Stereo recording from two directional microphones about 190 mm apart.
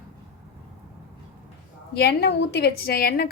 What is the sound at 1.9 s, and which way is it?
A woman's voice, 60° left (ahead or behind).